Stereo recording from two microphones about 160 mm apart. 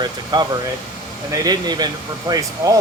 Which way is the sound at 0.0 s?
25° right (ahead or behind).